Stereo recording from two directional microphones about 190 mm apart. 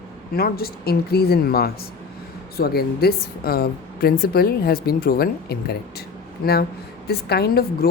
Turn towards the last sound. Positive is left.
turn(degrees=55)  # may be behind; listen again after turning